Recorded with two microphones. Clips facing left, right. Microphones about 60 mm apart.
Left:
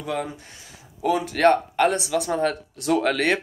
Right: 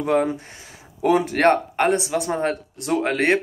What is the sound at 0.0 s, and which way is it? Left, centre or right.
Speech, right.